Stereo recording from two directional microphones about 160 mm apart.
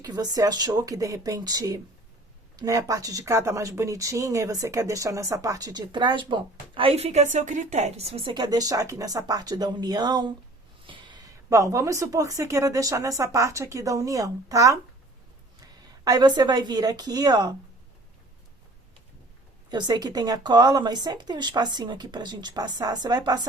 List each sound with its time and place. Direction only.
0.0 s speech: 25° right (ahead or behind)
16.0 s speech: 25° right (ahead or behind)
19.7 s speech: 25° right (ahead or behind)